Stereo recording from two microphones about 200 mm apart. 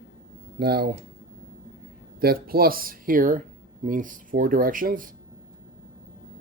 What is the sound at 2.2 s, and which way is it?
Speech, 50° right (ahead or behind).